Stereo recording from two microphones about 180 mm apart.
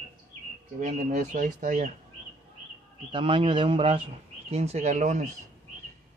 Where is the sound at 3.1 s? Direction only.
30° right (ahead or behind).